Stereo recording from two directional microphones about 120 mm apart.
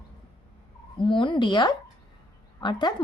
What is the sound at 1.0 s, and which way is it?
A woman's voice, 45° left (ahead or behind).